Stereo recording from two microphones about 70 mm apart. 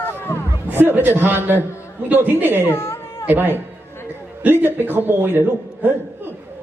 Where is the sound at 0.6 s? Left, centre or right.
Right.